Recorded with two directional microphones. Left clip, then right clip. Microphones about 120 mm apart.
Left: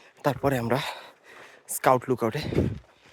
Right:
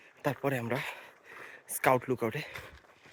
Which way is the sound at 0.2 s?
40° left (ahead or behind).